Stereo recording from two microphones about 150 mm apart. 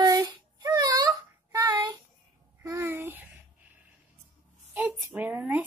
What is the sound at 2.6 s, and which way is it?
Speech, 20° right (ahead or behind).